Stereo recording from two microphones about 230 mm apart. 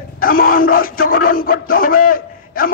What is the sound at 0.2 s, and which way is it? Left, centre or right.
Speech, left.